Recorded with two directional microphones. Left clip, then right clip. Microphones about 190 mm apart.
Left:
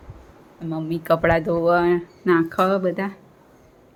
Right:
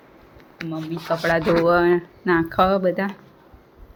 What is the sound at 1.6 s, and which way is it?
Speech, 5° right (ahead or behind).